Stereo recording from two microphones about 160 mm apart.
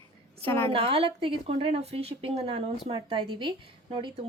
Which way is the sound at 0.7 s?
35° right (ahead or behind).